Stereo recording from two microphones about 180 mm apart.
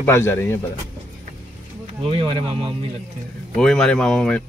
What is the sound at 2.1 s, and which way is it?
Speech, 30° right (ahead or behind).